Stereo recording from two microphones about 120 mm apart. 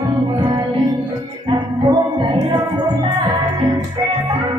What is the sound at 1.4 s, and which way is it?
Music, 40° right (ahead or behind).